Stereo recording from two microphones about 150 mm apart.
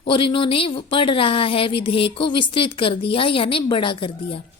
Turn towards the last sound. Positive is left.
turn(degrees=35)  # may be behind; listen again after turning